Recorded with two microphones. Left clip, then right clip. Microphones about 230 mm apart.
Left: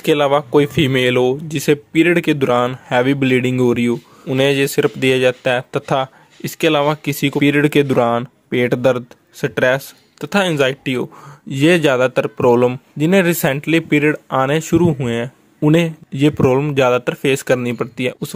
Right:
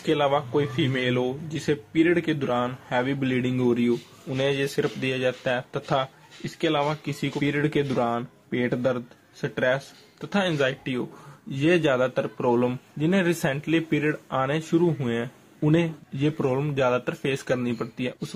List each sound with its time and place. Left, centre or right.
0.0 s speech: left